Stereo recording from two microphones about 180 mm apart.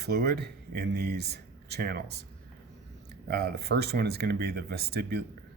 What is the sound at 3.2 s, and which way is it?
Speech, 60° right (ahead or behind).